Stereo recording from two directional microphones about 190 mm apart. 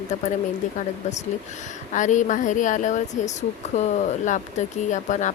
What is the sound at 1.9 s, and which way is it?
Speech, 40° left (ahead or behind).